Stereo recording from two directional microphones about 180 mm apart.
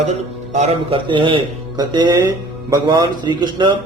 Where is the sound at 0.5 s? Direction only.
35° right (ahead or behind).